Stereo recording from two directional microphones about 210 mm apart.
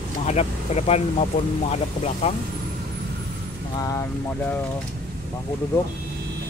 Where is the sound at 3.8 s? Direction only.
15° left (ahead or behind).